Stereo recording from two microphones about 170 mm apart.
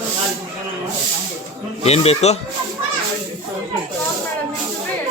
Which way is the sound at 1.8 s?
40° left (ahead or behind).